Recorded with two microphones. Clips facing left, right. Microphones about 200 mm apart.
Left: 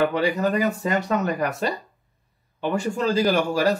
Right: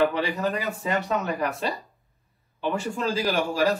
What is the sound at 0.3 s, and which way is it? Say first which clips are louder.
Speech: left 5 dB; centre (ahead or behind).